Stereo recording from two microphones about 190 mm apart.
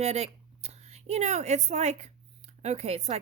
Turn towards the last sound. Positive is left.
turn(degrees=-35)  # may be behind; listen again after turning